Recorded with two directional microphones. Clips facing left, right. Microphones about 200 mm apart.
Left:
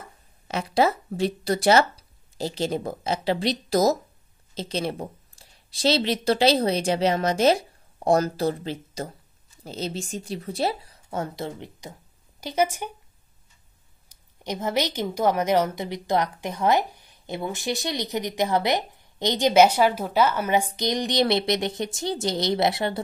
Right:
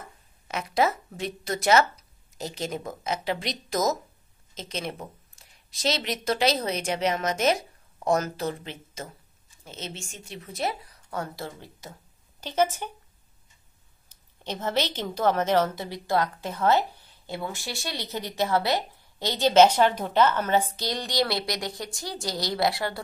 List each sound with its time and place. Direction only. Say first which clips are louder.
0.5 s a woman's voice: left 3 dB; 30° left (ahead or behind); by 12.9 s 10° left (ahead or behind)
14.0 s a woman's voice: left 3 dB; 10° left (ahead or behind)